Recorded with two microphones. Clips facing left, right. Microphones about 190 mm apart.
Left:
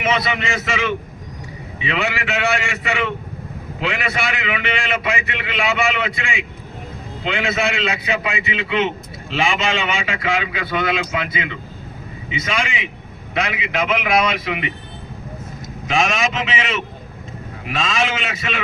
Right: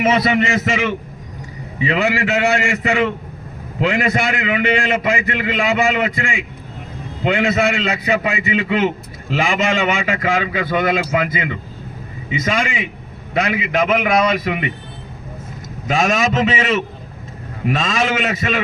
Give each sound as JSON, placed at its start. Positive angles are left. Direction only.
{"t": 0.0, "sound": "a man's voice", "side_deg": -40}
{"t": 15.9, "sound": "a man's voice", "side_deg": -40}